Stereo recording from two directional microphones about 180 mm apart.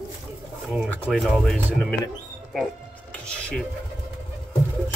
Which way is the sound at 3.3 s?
5° left (ahead or behind).